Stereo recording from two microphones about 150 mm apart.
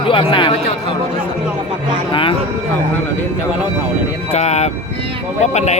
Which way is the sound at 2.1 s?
35° left (ahead or behind).